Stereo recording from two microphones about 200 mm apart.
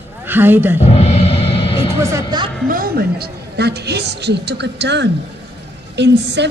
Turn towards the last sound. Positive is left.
turn(degrees=-60)  # may be behind; listen again after turning